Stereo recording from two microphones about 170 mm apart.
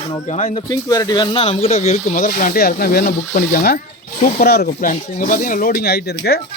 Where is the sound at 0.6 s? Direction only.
20° left (ahead or behind); by 6.4 s 70° left (ahead or behind).